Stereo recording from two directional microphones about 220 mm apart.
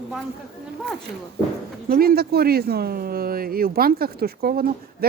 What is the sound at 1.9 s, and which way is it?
Speech, 45° right (ahead or behind).